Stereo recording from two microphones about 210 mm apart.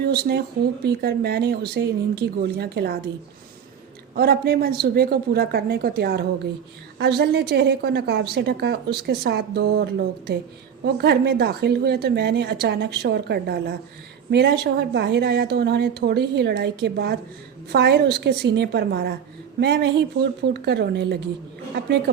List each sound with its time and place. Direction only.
0.0 s a woman's voice: 50° right (ahead or behind)
4.1 s a woman's voice: 50° right (ahead or behind)